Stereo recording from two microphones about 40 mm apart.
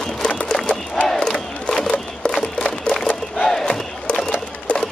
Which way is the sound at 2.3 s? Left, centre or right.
Centre.